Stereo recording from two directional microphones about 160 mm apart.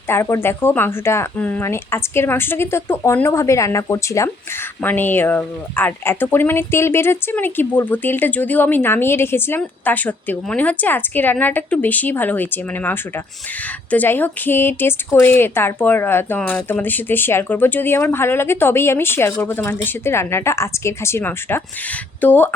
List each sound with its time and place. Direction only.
0.1 s speech: 15° left (ahead or behind)